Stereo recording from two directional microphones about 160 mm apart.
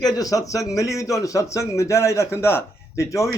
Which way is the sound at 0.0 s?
25° left (ahead or behind).